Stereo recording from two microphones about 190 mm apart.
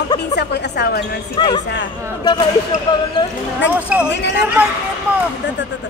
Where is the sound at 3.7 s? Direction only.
5° right (ahead or behind).